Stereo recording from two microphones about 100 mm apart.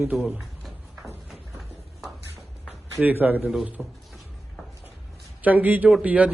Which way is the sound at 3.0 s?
20° right (ahead or behind).